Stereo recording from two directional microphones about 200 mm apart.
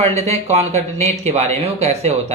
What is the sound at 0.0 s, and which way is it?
Speech, 30° right (ahead or behind).